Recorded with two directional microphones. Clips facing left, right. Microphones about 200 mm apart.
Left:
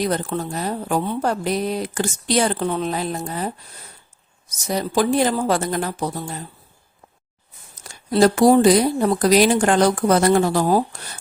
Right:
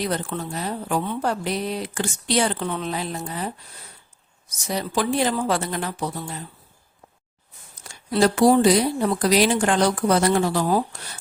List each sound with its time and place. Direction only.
0.0 s speech: 40° left (ahead or behind)
7.9 s speech: 40° left (ahead or behind)